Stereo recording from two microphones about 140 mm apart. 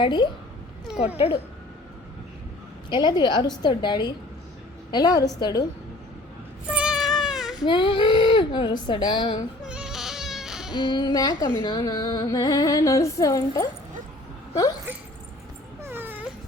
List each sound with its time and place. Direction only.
0.0 s speech: 30° left (ahead or behind)
2.9 s speech: 30° left (ahead or behind)
6.7 s a sound: 5° right (ahead or behind)
7.6 s speech: 35° left (ahead or behind)
9.6 s baby cry: 5° right (ahead or behind)
10.8 s speech: 30° left (ahead or behind)
15.8 s dog: 15° right (ahead or behind)